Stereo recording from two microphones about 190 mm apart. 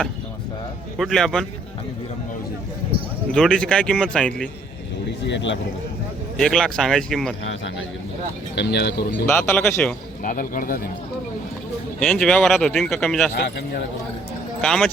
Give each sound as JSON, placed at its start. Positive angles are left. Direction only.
{"t": 0.9, "sound": "speech", "side_deg": 0}
{"t": 3.3, "sound": "speech", "side_deg": 5}
{"t": 5.2, "sound": "speech", "side_deg": 70}
{"t": 6.3, "sound": "speech", "side_deg": 0}
{"t": 8.5, "sound": "speech", "side_deg": 60}
{"t": 9.2, "sound": "speech", "side_deg": 10}
{"t": 10.2, "sound": "speech", "side_deg": 45}
{"t": 11.9, "sound": "speech", "side_deg": 5}
{"t": 13.3, "sound": "speech", "side_deg": 60}
{"t": 14.6, "sound": "speech", "side_deg": 5}